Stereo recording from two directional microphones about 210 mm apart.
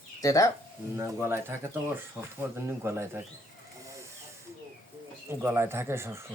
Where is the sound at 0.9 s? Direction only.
10° right (ahead or behind).